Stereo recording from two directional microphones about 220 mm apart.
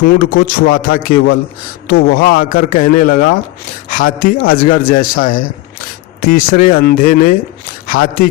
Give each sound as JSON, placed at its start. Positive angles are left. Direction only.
{"t": 0.0, "sound": "a man's voice", "side_deg": 45}